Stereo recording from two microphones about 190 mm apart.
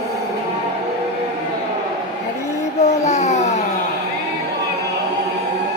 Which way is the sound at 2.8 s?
40° left (ahead or behind).